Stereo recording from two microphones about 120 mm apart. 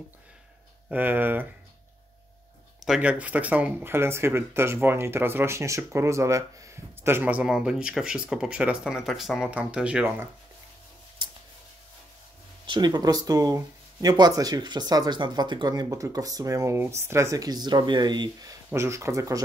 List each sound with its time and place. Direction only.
0.8 s speech: 15° right (ahead or behind)
2.8 s speech: 5° right (ahead or behind)
11.2 s scissors: 35° right (ahead or behind)
12.6 s speech: 40° right (ahead or behind)